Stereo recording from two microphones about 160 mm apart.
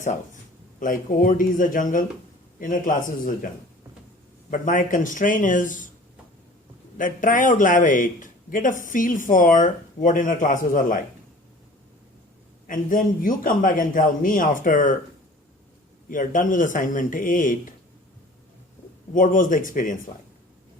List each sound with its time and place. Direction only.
0.8 s speech: 60° left (ahead or behind)
4.5 s speech: 55° left (ahead or behind)
7.0 s speech: 55° left (ahead or behind)
12.6 s speech: 60° left (ahead or behind)
16.0 s speech: 55° left (ahead or behind)
19.1 s speech: 55° left (ahead or behind)